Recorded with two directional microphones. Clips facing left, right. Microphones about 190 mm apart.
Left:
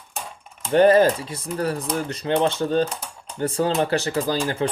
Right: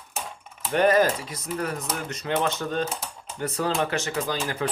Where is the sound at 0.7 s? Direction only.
30° left (ahead or behind).